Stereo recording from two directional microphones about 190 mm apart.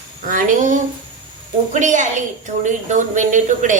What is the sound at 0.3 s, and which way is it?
A woman's voice, 45° right (ahead or behind).